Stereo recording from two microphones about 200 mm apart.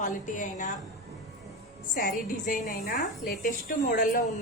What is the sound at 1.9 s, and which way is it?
A woman's voice, 45° left (ahead or behind).